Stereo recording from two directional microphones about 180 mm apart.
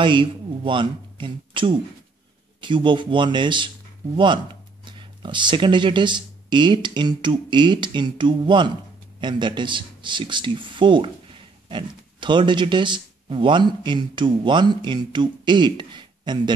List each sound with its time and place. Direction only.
0.0 s speech: 25° right (ahead or behind)